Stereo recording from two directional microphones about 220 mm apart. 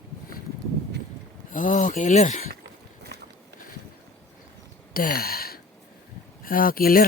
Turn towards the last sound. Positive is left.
turn(degrees=40)  # may be behind; listen again after turning